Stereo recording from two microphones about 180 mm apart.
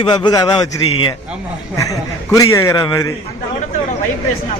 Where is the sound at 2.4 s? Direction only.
15° left (ahead or behind).